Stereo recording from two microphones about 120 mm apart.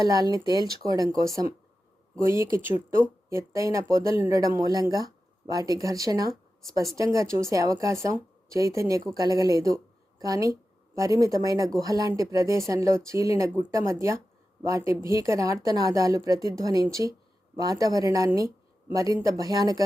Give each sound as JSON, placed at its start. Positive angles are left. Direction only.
{"t": 0.0, "sound": "speech", "side_deg": -30}